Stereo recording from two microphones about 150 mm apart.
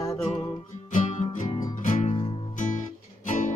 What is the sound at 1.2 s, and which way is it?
Music, 55° left (ahead or behind).